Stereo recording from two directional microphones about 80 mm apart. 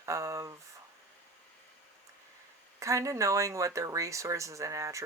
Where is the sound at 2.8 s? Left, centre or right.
Right.